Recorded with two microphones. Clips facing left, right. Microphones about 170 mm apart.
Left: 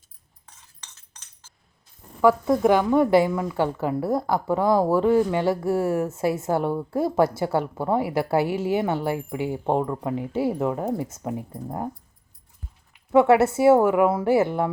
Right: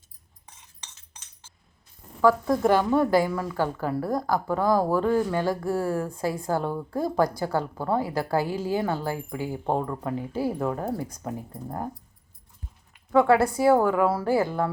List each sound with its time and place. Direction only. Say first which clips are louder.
2.6 s a woman's voice: left 2 dB; 15° left (ahead or behind)
13.1 s a woman's voice: left 3 dB; 25° left (ahead or behind)